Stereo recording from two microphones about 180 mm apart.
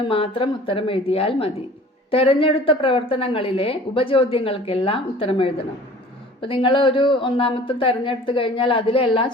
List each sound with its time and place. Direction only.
0.0 s a woman's voice: 30° left (ahead or behind)